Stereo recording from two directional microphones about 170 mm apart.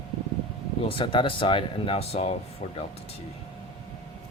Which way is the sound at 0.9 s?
30° left (ahead or behind).